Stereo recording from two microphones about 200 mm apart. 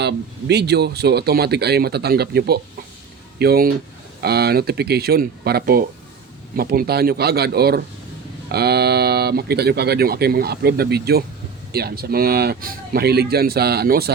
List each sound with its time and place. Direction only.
0.0 s speech: 55° right (ahead or behind)